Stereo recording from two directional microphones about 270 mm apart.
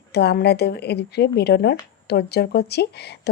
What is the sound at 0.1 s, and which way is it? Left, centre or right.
Speech, left.